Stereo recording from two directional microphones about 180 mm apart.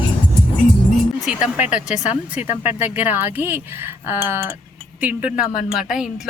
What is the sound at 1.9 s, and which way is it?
Speech, 40° left (ahead or behind).